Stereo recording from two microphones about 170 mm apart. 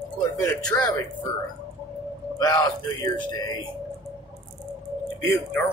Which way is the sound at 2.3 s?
20° left (ahead or behind).